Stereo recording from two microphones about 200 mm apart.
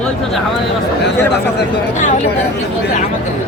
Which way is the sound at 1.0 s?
60° left (ahead or behind).